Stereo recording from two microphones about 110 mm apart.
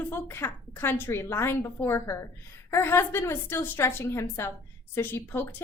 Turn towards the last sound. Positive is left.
turn(degrees=20)  # may be behind; listen again after turning